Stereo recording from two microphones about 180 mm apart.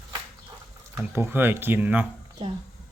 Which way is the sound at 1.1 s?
15° right (ahead or behind).